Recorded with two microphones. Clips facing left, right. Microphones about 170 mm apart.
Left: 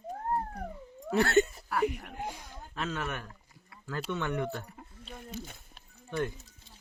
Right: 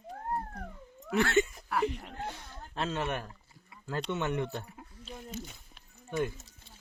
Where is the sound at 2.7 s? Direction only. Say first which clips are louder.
Right 2 dB; 30° right (ahead or behind).